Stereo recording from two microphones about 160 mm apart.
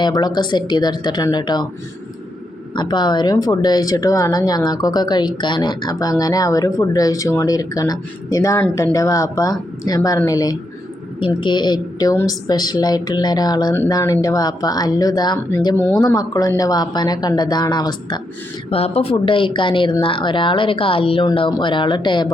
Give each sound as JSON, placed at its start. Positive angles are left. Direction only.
{"t": 0.0, "sound": "speech", "side_deg": 25}
{"t": 2.7, "sound": "speech", "side_deg": 25}
{"t": 18.7, "sound": "speech", "side_deg": 40}